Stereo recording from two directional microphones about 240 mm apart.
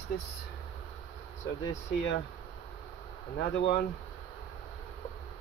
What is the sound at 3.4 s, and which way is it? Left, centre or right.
Speech, left.